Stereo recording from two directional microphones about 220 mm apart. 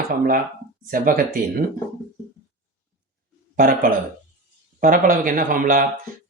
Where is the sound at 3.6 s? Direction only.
40° right (ahead or behind).